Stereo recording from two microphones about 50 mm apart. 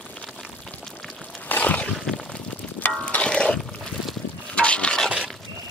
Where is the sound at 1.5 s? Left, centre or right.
Left.